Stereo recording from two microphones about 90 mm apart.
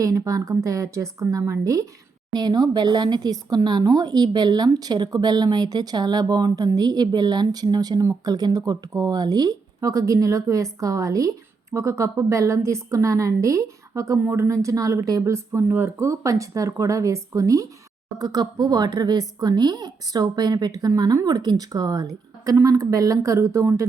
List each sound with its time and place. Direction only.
0.0 s speech: 40° right (ahead or behind)
2.3 s speech: 50° right (ahead or behind)